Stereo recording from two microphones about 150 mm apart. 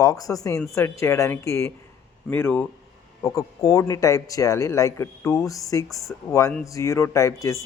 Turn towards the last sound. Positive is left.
turn(degrees=20)  # may be behind; listen again after turning